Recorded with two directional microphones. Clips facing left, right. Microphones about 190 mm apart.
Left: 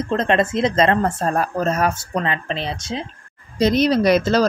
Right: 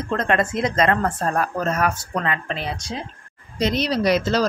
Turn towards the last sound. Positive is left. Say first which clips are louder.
# left 4 dB
turn(degrees=50)  # may be behind; listen again after turning